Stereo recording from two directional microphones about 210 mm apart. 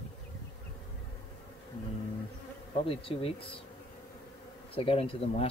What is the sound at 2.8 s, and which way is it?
Speech, 25° left (ahead or behind).